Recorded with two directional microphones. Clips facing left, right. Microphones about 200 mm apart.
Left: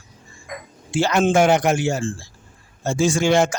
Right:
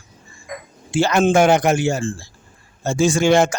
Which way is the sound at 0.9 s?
50° right (ahead or behind).